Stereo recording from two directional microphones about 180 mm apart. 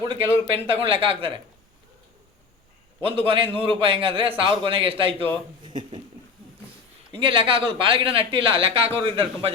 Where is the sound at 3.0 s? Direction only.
30° right (ahead or behind).